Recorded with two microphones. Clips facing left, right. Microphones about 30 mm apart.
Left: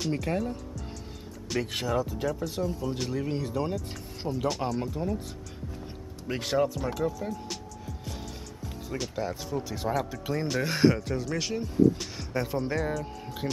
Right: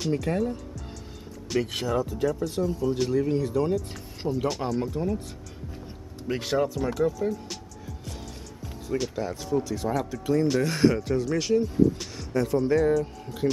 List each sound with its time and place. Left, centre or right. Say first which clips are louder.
0.2 s speech: right 3 dB; centre
3.7 s speech: right 5 dB; centre
6.2 s speech: right 1 dB; centre
8.8 s speech: right 4 dB; centre
11.0 s speech: right 5 dB; centre
12.3 s speech: right 7 dB; centre